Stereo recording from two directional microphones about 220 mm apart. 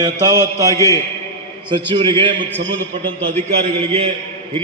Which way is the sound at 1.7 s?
20° right (ahead or behind).